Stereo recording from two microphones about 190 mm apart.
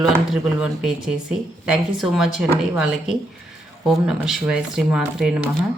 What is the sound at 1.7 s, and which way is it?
A woman's voice, 5° right (ahead or behind).